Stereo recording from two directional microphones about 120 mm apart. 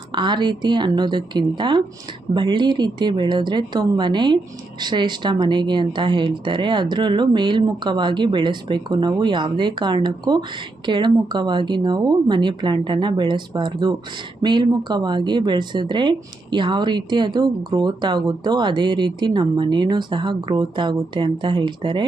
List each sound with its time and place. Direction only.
0.1 s speech: 40° right (ahead or behind)